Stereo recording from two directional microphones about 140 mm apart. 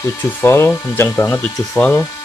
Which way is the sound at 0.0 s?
15° left (ahead or behind).